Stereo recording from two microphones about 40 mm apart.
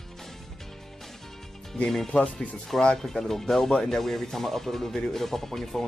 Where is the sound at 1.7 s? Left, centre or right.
Centre.